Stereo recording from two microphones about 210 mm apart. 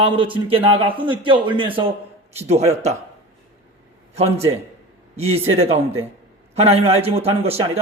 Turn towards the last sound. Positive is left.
turn(degrees=-30)  # may be behind; listen again after turning